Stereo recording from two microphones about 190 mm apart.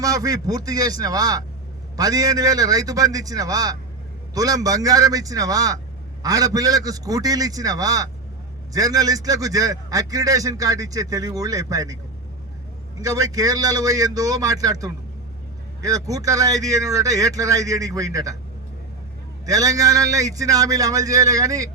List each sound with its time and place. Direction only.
0.0 s a man's voice: 20° right (ahead or behind)
13.0 s a man's voice: 20° right (ahead or behind)
19.5 s a man's voice: 20° right (ahead or behind)